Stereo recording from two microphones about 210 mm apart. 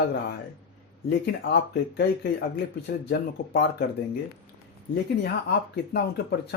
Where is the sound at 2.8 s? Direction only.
55° left (ahead or behind).